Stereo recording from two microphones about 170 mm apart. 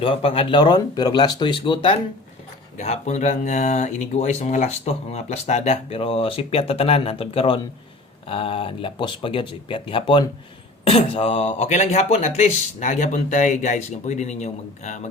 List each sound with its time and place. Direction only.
0.0 s speech: 35° left (ahead or behind)